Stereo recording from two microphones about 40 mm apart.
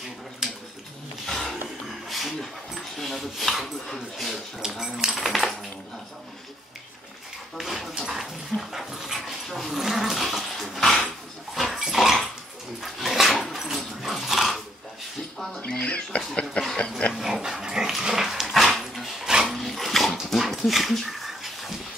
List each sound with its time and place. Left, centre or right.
0.4 s a sound: centre
1.2 s a sound: centre
2.0 s rub: centre
3.8 s speech: centre
4.6 s speech: centre
7.5 s speech: centre
10.8 s dog: centre
11.5 s dog: centre
15.6 s speech: left
17.1 s dog: centre
18.5 s dog: centre
19.2 s dog: centre
19.5 s dog: centre